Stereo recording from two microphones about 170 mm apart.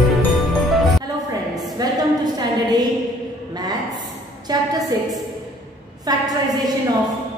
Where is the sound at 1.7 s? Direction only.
25° right (ahead or behind).